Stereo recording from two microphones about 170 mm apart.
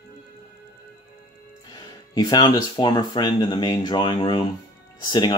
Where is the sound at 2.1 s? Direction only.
25° left (ahead or behind).